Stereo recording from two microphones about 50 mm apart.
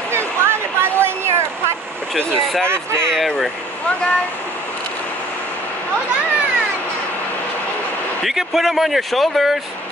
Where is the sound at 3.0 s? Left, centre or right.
Centre.